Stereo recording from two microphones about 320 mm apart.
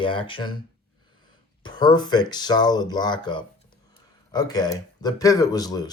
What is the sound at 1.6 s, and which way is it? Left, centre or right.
Speech, centre.